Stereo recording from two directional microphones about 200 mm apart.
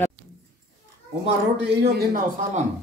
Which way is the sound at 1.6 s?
55° right (ahead or behind).